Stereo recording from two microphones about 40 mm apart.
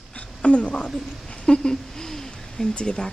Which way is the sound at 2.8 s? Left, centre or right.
Left.